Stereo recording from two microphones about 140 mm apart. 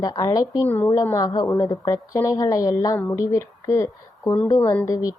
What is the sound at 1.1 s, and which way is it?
A woman's voice, 25° left (ahead or behind).